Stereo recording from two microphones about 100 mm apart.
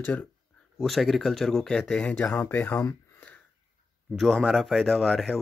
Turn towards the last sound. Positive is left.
turn(degrees=0)  # may be behind; listen again after turning